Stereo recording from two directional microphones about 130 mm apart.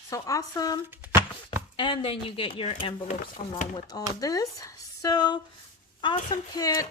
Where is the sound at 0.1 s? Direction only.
25° left (ahead or behind).